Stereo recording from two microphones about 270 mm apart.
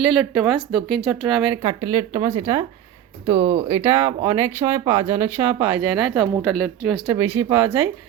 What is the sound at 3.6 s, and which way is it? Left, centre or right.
A woman's voice, centre.